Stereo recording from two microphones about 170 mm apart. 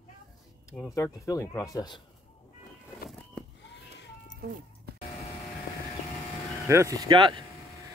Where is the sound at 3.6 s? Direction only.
90° left.